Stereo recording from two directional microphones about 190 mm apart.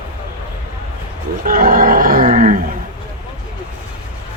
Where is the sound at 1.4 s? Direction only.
50° right (ahead or behind).